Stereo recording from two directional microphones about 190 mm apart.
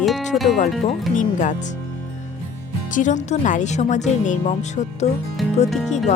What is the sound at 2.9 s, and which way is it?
Speech, 40° left (ahead or behind).